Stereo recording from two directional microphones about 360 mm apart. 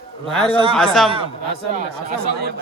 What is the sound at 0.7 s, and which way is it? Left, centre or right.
Speech, centre.